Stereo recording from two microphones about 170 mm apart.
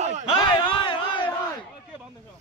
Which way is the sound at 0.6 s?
30° left (ahead or behind).